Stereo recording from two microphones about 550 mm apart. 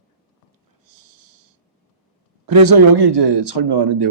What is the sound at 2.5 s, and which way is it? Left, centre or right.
Speech, right.